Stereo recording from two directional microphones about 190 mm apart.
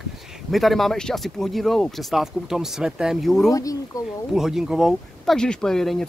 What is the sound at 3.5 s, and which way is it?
Speech, 20° left (ahead or behind).